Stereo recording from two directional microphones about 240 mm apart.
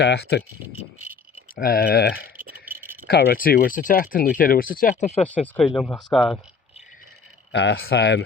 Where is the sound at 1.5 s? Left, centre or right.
Left.